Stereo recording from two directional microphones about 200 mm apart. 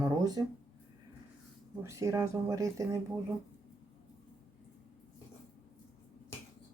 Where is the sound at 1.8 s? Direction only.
15° right (ahead or behind).